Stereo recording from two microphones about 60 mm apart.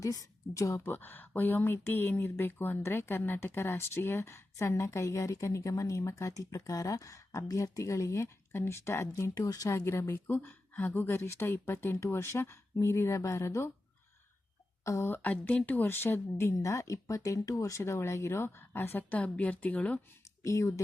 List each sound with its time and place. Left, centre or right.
0.0 s a woman's voice: left
0.9 s speech: left
9.7 s speech: left
14.8 s speech: left
15.1 s speech: left
15.9 s speech: left
20.4 s speech: left